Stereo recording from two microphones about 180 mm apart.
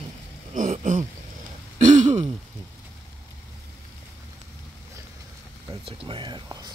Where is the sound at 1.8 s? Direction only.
40° right (ahead or behind).